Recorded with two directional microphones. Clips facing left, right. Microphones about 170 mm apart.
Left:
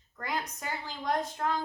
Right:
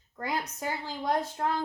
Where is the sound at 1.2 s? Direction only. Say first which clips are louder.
Right 1 dB; 30° right (ahead or behind).